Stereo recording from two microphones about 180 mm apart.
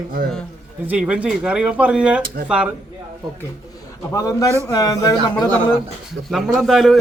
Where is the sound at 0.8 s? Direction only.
5° right (ahead or behind).